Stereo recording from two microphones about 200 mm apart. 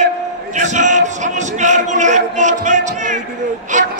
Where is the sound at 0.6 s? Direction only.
35° right (ahead or behind).